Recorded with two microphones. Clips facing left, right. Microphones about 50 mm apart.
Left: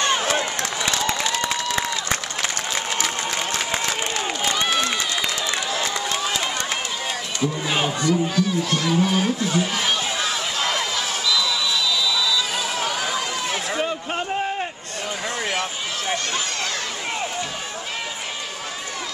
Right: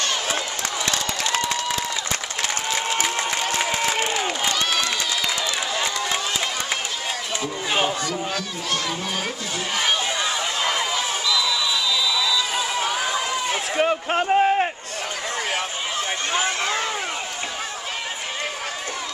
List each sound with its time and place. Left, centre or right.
3.0 s applause: centre
4.6 s run: centre
5.7 s run: centre
8.1 s a sound: centre
12.1 s run: centre
13.7 s a sound: right